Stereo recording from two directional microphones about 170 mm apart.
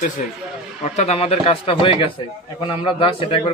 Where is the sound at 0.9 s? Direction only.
35° left (ahead or behind).